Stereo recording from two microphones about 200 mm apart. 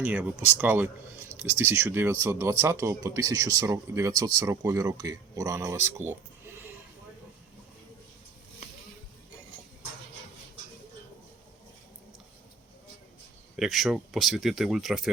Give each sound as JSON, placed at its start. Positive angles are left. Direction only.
{"t": 0.0, "sound": "speech", "side_deg": -10}
{"t": 13.6, "sound": "speech", "side_deg": 0}